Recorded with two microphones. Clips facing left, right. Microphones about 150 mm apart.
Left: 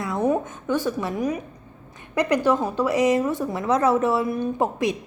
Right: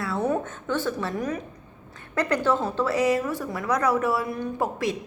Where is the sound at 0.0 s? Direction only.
15° left (ahead or behind).